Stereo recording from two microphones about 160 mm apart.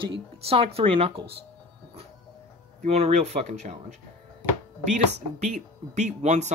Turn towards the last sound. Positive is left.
turn(degrees=-45)  # may be behind; listen again after turning